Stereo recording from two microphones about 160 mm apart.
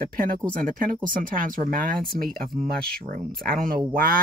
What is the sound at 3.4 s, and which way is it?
Speech, 65° right (ahead or behind).